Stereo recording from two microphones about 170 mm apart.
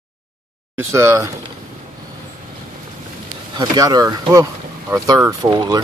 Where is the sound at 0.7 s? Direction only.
15° right (ahead or behind).